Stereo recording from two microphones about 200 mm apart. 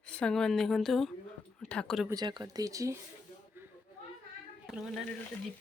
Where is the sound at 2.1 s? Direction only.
20° right (ahead or behind).